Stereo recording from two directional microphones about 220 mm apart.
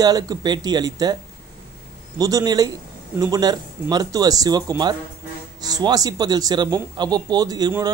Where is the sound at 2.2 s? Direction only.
15° right (ahead or behind).